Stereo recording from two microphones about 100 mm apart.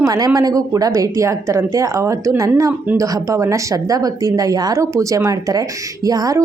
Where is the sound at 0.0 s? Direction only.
40° right (ahead or behind).